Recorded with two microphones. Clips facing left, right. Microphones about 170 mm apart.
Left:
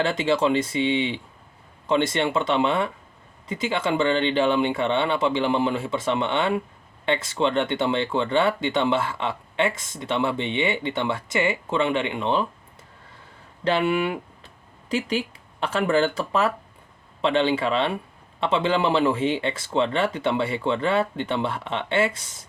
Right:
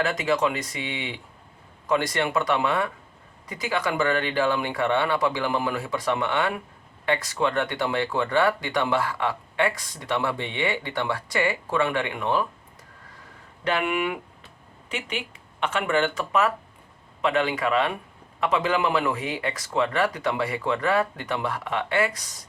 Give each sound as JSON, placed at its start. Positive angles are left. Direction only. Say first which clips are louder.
{"t": 0.0, "sound": "speech", "louder": "left 2 dB", "side_deg": 30}
{"t": 13.7, "sound": "speech", "louder": "left 3 dB", "side_deg": 30}